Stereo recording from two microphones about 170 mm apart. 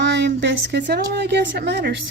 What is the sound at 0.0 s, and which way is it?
A woman's voice, 90° right.